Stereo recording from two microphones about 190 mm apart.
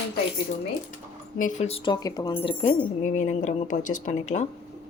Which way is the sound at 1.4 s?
40° left (ahead or behind).